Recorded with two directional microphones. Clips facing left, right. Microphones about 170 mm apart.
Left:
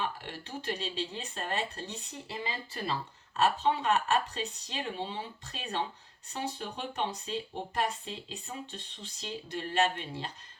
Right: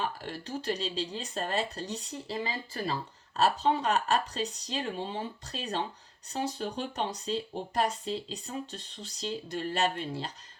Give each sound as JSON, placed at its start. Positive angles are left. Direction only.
{"t": 0.0, "sound": "speech", "side_deg": -40}
{"t": 3.3, "sound": "speech", "side_deg": -40}